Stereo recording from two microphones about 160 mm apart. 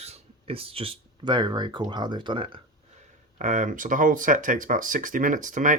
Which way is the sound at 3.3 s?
55° right (ahead or behind).